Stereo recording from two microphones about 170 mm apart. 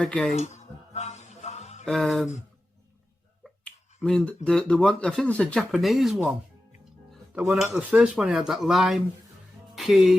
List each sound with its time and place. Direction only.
0.0 s speech: 5° left (ahead or behind)
0.3 s music: 40° left (ahead or behind)
1.8 s speech: centre (ahead or behind)
3.4 s finger snapping: 5° left (ahead or behind)
4.4 s speech: 5° left (ahead or behind)